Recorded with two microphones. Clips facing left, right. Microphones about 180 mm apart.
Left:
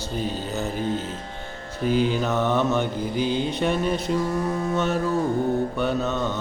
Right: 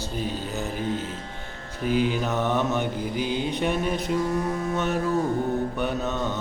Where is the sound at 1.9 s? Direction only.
15° right (ahead or behind).